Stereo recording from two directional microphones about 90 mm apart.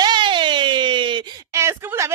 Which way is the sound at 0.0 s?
60° right (ahead or behind).